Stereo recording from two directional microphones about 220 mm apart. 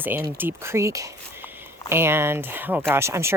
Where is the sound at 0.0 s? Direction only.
10° right (ahead or behind).